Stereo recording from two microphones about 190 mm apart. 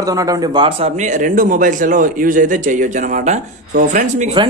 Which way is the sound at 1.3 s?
45° right (ahead or behind).